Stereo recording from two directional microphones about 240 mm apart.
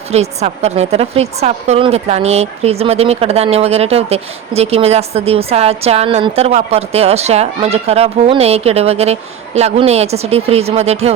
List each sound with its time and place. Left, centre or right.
0.1 s a woman's voice: right